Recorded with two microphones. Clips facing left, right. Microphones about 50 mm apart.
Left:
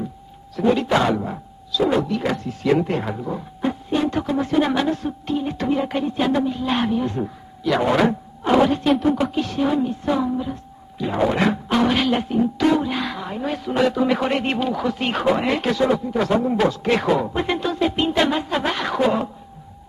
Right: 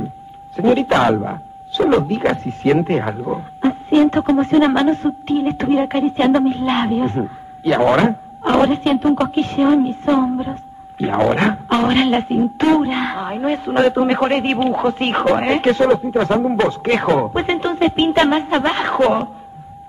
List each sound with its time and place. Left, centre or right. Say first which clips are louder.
0.6 s a woman's voice: right 4 dB; right
3.1 s a woman's voice: right 5 dB; right
4.4 s a woman's voice: right 4 dB; right
8.8 s speech: right 3 dB; centre
9.2 s a woman's voice: right 5 dB; right